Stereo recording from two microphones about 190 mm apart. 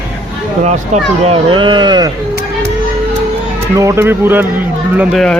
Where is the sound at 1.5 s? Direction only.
25° right (ahead or behind).